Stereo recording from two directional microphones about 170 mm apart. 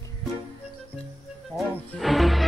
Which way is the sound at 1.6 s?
Centre (ahead or behind).